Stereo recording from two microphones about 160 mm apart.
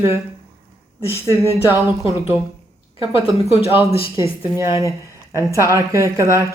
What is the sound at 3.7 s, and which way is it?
A woman's voice, 20° right (ahead or behind).